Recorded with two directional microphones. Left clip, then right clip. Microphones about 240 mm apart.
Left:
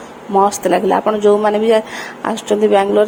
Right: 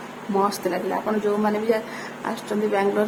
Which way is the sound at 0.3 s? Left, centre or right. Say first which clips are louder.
Left 10 dB; left.